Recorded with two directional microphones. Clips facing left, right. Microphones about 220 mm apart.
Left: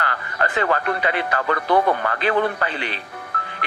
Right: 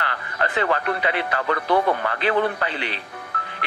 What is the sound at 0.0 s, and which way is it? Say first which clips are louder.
Speech: left 2 dB; 45° left (ahead or behind).